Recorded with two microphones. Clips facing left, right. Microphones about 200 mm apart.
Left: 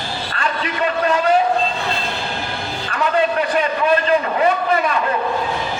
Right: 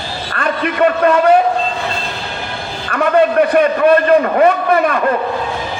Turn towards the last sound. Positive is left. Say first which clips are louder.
# right 5 dB
turn(degrees=-55)  # may be behind; listen again after turning